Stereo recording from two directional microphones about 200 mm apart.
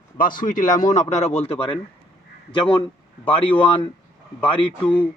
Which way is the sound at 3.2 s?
25° left (ahead or behind).